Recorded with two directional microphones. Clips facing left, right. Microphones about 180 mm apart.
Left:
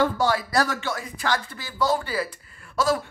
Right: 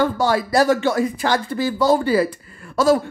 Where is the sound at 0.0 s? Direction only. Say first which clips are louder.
Right 4 dB; 30° right (ahead or behind).